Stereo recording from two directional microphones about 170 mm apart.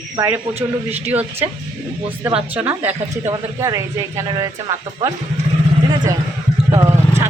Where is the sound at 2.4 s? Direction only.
10° right (ahead or behind).